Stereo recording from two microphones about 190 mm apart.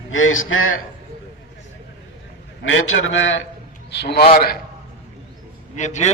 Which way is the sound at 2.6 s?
90° left.